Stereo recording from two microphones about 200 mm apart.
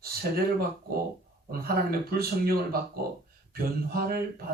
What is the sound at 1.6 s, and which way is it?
A man's voice, 50° right (ahead or behind).